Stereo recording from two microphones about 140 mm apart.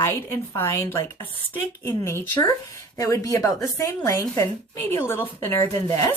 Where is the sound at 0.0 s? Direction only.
20° left (ahead or behind).